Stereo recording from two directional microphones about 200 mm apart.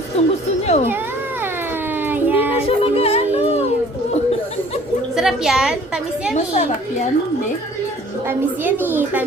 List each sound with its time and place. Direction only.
0.2 s speech: 30° left (ahead or behind)
2.0 s child singing: 10° right (ahead or behind)
2.6 s music: 30° left (ahead or behind)
5.1 s a woman's voice: centre (ahead or behind)
6.3 s a woman's voice: 35° left (ahead or behind)
8.3 s a woman's voice: 10° right (ahead or behind)